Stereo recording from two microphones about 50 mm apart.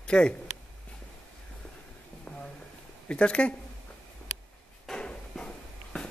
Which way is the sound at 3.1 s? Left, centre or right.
Left.